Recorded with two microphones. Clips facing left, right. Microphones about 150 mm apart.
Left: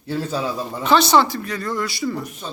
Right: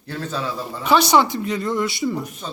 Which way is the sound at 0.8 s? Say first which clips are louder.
Even; 10° right (ahead or behind).